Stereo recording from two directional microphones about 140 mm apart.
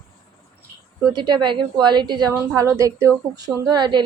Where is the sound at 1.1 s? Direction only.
30° right (ahead or behind).